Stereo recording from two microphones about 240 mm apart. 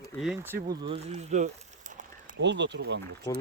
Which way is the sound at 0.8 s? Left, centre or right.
Right.